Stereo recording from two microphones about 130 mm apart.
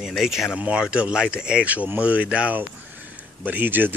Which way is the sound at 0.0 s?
Centre (ahead or behind).